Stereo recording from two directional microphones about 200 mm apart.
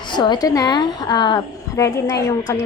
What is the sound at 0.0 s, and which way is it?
A woman's voice, 20° left (ahead or behind).